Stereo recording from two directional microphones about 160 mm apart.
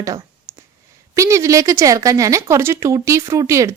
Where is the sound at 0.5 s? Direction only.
15° right (ahead or behind).